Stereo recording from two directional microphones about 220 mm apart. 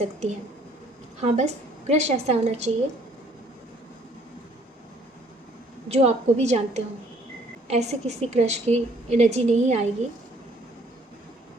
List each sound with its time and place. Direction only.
0.0 s a woman's voice: 30° right (ahead or behind)
5.9 s a woman's voice: 30° right (ahead or behind)